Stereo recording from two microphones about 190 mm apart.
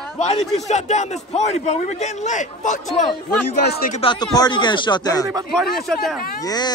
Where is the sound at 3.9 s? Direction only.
30° left (ahead or behind).